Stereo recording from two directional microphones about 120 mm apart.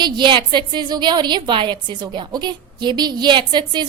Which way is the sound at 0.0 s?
40° right (ahead or behind).